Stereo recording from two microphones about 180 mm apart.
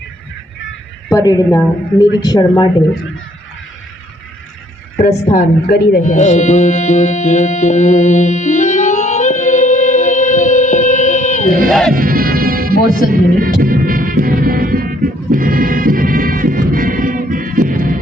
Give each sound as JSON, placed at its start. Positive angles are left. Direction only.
{"t": 1.1, "sound": "speech", "side_deg": 20}
{"t": 5.0, "sound": "speech", "side_deg": 40}
{"t": 6.1, "sound": "music", "side_deg": 40}
{"t": 11.7, "sound": "speech", "side_deg": 0}
{"t": 11.9, "sound": "music", "side_deg": -55}